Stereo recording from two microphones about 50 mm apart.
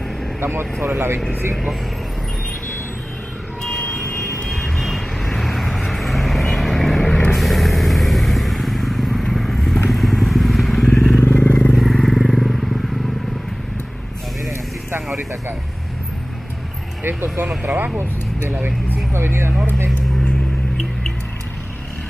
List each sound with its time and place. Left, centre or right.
0.4 s speech: right
4.5 s vehicle: centre
9.8 s motorcycle: centre
11.1 s vehicle: left
11.7 s vehicle: centre
17.6 s speech: right
19.1 s speech: right